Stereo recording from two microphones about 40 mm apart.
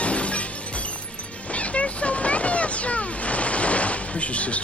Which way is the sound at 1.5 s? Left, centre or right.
Left.